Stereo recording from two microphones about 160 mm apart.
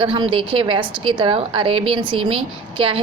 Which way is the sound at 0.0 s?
35° right (ahead or behind).